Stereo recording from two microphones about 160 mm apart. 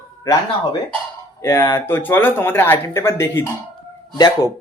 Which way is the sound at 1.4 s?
15° left (ahead or behind).